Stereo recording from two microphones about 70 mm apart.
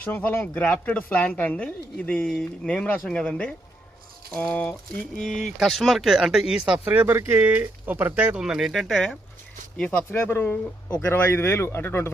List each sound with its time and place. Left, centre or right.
0.0 s speech: left
5.1 s speech: centre
6.7 s speech: right
8.4 s speech: centre
10.1 s speech: left